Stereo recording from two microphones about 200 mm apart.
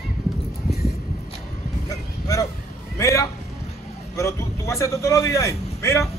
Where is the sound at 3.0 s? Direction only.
15° left (ahead or behind).